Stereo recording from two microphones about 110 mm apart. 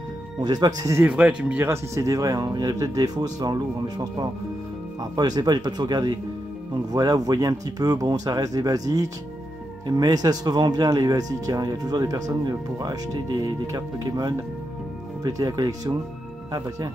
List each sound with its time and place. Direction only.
0.4 s speech: 40° right (ahead or behind)
1.0 s speech: 10° right (ahead or behind)
1.7 s speech: 30° right (ahead or behind)